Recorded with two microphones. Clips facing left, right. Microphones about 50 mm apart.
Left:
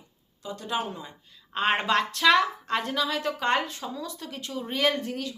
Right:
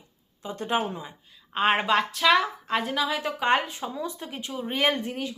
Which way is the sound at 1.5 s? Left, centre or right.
Centre.